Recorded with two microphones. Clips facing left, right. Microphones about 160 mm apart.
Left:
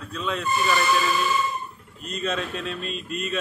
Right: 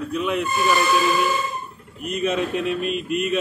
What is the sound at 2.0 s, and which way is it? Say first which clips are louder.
Speech: right 6 dB; 15° right (ahead or behind).